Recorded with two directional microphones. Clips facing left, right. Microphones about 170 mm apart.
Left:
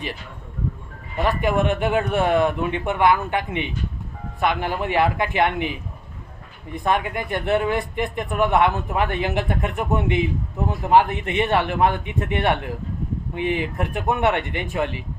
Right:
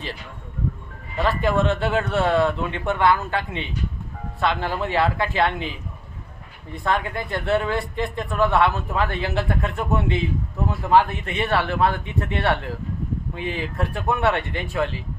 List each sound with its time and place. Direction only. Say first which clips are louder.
1.2 s speech: even; 15° left (ahead or behind)
6.7 s speech: left 2 dB; 15° left (ahead or behind)